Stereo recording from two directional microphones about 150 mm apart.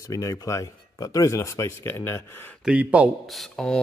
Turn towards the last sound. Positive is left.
turn(degrees=5)  # may be behind; listen again after turning